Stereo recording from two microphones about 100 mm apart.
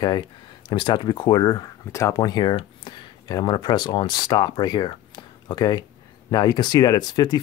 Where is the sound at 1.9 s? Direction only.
30° left (ahead or behind).